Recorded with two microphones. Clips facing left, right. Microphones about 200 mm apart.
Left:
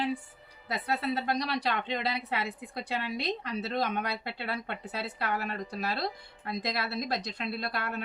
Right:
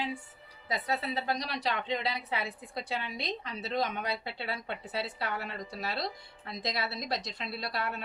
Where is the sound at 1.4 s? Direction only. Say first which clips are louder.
Left 3 dB; 60° left (ahead or behind).